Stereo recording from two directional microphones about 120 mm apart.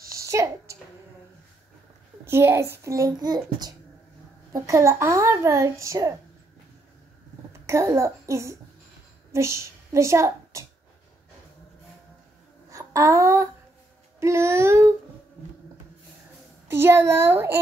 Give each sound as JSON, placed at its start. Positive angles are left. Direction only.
{"t": 0.1, "sound": "a sound", "side_deg": -25}
{"t": 2.2, "sound": "speech", "side_deg": -20}
{"t": 7.6, "sound": "a child's voice", "side_deg": -25}
{"t": 12.6, "sound": "a sound", "side_deg": -30}
{"t": 14.2, "sound": "speech", "side_deg": -25}
{"t": 16.6, "sound": "speech", "side_deg": -20}